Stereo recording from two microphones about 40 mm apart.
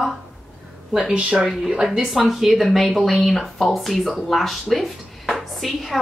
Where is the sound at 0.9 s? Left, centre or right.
Right.